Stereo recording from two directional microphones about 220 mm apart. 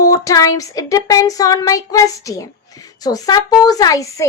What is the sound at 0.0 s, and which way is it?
Speech, 15° left (ahead or behind).